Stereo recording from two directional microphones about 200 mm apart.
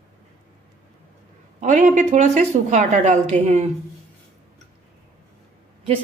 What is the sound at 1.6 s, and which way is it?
Speech, 35° right (ahead or behind).